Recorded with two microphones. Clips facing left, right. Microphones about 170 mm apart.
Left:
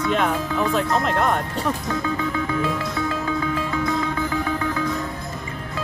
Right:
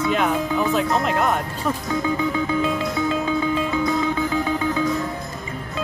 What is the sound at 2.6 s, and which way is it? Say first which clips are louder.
Music: right 2 dB; 20° right (ahead or behind).